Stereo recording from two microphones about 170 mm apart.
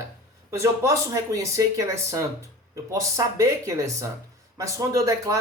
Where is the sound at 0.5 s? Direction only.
20° right (ahead or behind).